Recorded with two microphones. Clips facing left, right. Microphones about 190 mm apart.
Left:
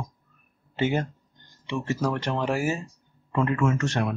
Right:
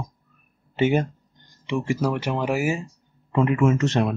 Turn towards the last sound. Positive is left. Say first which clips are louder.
# right 5 dB
turn(degrees=-20)  # may be behind; listen again after turning